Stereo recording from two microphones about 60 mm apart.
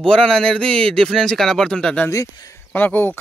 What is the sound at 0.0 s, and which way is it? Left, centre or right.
A man's voice, centre.